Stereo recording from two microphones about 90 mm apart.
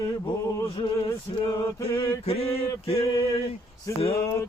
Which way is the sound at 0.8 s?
65° left (ahead or behind).